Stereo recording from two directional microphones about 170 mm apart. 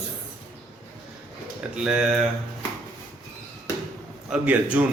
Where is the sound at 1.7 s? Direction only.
5° right (ahead or behind).